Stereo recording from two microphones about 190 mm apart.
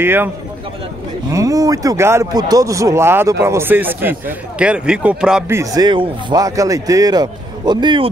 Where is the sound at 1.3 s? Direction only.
15° right (ahead or behind).